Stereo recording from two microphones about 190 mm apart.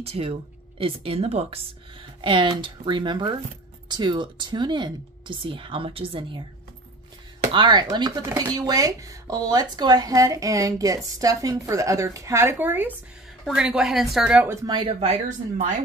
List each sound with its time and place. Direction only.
0.0 s speech: 30° right (ahead or behind)
7.5 s speech: 25° right (ahead or behind)